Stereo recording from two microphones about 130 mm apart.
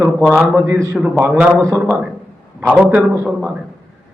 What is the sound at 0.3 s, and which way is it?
Speech, centre (ahead or behind).